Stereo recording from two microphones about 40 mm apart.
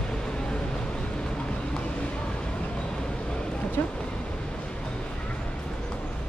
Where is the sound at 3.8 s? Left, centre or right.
Left.